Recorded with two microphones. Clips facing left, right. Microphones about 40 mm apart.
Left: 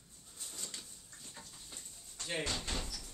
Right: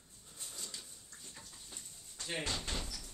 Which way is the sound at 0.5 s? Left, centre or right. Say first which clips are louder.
Left 1 dB; left.